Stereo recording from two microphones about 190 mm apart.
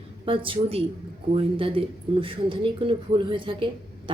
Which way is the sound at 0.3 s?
25° right (ahead or behind).